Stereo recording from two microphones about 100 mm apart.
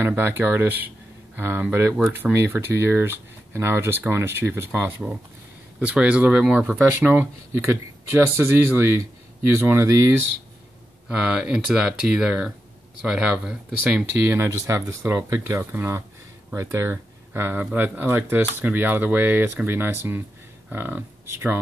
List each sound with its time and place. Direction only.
0.0 s speech: 20° right (ahead or behind)
5.8 s speech: 10° right (ahead or behind); by 10.1 s 30° right (ahead or behind)
11.1 s speech: 5° right (ahead or behind)
14.2 s speech: 25° right (ahead or behind)